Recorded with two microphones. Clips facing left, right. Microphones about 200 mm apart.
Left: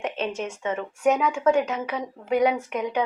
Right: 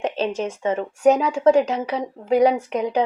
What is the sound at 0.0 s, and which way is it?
Speech, 35° right (ahead or behind).